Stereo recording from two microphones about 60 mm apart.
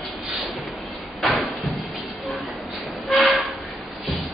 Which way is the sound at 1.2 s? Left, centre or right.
Centre.